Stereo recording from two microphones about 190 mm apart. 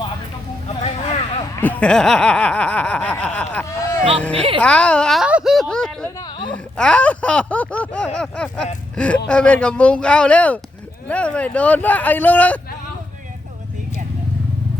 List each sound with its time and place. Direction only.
0.8 s vehicle: 35° left (ahead or behind)
1.6 s snicker: 10° left (ahead or behind)
4.6 s a sound: 5° left (ahead or behind)
11.1 s snicker: 5° left (ahead or behind)